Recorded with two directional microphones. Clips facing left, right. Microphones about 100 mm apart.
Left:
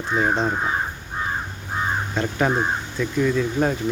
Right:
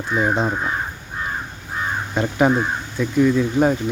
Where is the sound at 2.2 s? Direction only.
15° right (ahead or behind).